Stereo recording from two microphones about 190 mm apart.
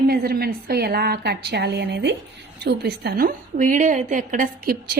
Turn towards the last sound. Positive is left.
turn(degrees=-50)  # may be behind; listen again after turning